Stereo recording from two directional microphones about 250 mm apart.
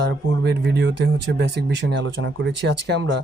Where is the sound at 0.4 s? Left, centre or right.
Right.